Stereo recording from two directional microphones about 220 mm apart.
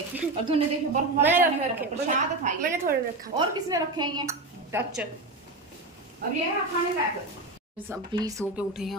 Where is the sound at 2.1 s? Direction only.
35° right (ahead or behind).